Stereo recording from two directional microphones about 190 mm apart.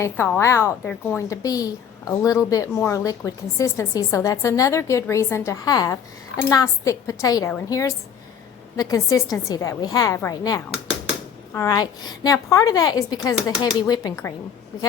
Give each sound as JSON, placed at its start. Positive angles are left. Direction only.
{"t": 0.0, "sound": "a woman's voice", "side_deg": 10}